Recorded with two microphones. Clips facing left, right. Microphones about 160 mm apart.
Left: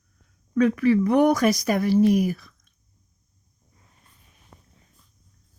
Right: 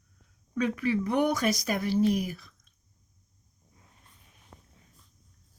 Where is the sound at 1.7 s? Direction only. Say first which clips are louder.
Left 6 dB; 70° left (ahead or behind).